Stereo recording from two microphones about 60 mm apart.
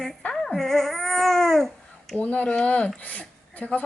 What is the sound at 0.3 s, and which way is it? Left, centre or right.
Babbling, centre.